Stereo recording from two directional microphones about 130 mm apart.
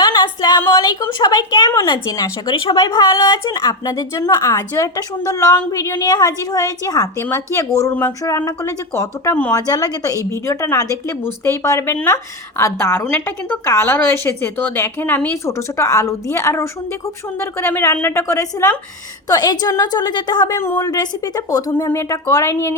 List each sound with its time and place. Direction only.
0.0 s music: 30° left (ahead or behind)
0.6 s a woman's voice: 25° left (ahead or behind)
9.6 s a woman's voice: 30° left (ahead or behind)
20.6 s a woman's voice: 20° left (ahead or behind)